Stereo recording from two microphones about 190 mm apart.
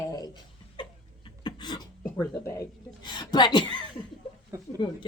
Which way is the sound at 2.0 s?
15° left (ahead or behind).